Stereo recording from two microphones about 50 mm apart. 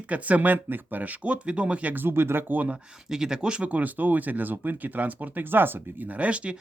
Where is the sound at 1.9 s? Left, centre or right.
Right.